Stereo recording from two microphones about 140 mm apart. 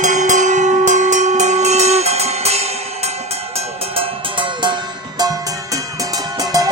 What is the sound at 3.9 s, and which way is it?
Music, 35° right (ahead or behind).